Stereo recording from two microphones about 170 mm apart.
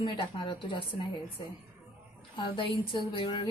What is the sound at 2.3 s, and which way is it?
A woman's voice, 30° left (ahead or behind).